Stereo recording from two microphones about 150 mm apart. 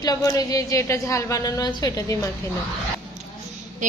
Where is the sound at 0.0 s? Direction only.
25° left (ahead or behind).